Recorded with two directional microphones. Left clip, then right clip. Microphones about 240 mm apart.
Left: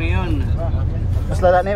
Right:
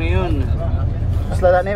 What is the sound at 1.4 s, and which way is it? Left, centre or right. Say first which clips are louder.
Speech: even; centre.